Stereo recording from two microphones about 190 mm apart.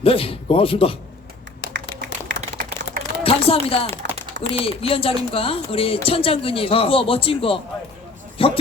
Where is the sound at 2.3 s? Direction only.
70° right (ahead or behind).